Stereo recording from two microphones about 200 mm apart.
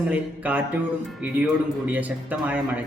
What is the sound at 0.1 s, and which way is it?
Speech, 10° right (ahead or behind).